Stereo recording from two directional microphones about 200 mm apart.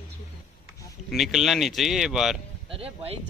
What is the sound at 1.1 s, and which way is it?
Speech, centre (ahead or behind).